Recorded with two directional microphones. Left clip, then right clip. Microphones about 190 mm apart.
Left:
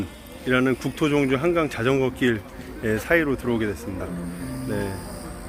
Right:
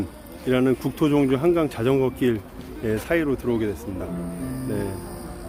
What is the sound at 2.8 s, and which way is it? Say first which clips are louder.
Speech: left 2 dB; 5° left (ahead or behind).